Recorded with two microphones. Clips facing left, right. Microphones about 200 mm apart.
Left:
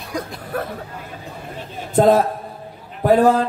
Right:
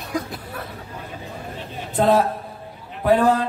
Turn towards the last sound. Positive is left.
turn(degrees=40)  # may be behind; listen again after turning